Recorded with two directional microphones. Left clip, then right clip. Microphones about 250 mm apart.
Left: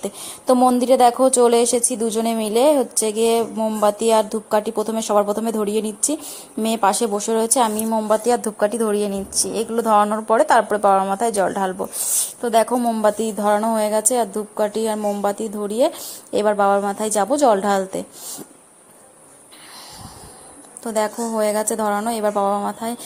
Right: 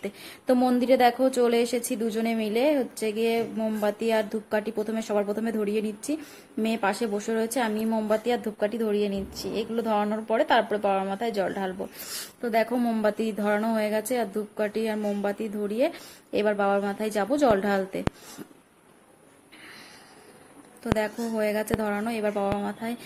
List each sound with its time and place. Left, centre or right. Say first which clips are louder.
0.0 s a woman's voice: left 7 dB; centre
6.6 s a woman's voice: left 8 dB; centre
20.8 s a woman's voice: left 6 dB; centre